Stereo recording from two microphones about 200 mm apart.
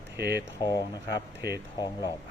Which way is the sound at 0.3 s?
20° left (ahead or behind).